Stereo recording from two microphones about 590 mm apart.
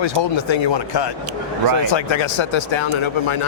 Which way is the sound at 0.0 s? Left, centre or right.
Left.